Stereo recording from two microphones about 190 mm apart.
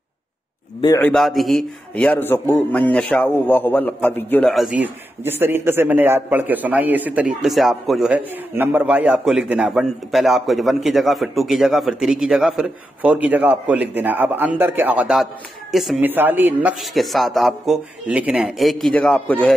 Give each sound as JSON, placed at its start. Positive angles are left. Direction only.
{"t": 0.7, "sound": "a man's voice", "side_deg": 20}
{"t": 1.0, "sound": "a man's voice", "side_deg": 0}